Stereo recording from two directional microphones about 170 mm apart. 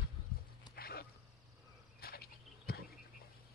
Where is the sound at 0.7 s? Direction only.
65° left (ahead or behind).